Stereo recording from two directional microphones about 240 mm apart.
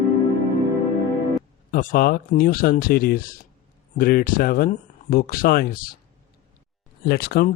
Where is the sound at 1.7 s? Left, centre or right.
Left.